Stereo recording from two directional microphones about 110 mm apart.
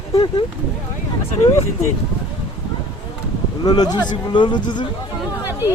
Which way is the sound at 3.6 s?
40° left (ahead or behind).